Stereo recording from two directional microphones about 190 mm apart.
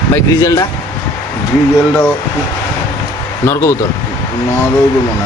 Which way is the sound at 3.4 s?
15° left (ahead or behind).